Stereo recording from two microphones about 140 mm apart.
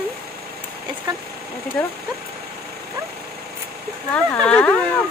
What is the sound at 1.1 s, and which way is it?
Speech, 30° right (ahead or behind).